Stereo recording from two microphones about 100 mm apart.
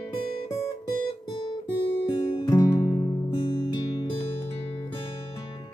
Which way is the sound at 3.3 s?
55° left (ahead or behind).